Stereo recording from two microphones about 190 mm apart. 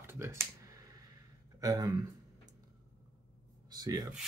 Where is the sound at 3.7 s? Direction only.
20° right (ahead or behind).